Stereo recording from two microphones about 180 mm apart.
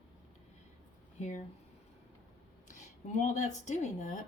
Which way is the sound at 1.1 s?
40° left (ahead or behind).